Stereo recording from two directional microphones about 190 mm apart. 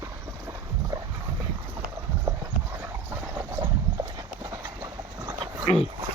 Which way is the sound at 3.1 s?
15° right (ahead or behind).